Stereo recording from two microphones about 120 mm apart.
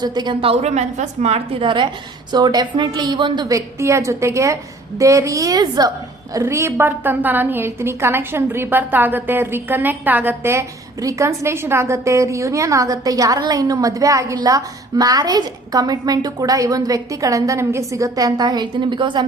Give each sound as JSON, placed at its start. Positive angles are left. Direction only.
{"t": 0.0, "sound": "speech", "side_deg": -35}
{"t": 0.4, "sound": "a woman's voice", "side_deg": -65}
{"t": 1.6, "sound": "speech", "side_deg": -40}
{"t": 3.5, "sound": "a woman's voice", "side_deg": -25}